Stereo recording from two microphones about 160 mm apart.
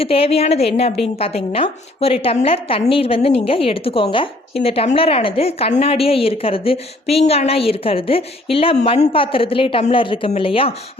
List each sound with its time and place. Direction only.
0.0 s a woman's voice: 35° left (ahead or behind)